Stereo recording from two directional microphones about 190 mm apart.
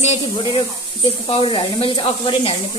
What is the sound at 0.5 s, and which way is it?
Speech, 25° left (ahead or behind).